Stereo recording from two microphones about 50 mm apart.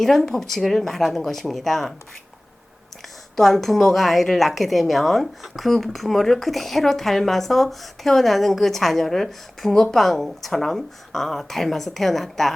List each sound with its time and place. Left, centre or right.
0.0 s a woman's voice: centre
3.3 s a woman's voice: centre